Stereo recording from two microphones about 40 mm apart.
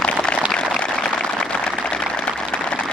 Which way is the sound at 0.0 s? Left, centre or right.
Left.